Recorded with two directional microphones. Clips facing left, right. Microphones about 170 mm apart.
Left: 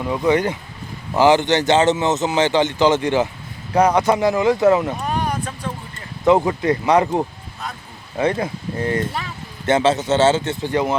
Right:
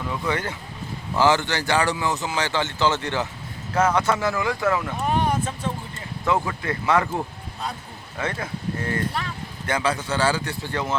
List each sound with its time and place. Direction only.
0.0 s a man's voice: 20° left (ahead or behind)
5.0 s a sound: 25° right (ahead or behind)
6.2 s a man's voice: 20° left (ahead or behind)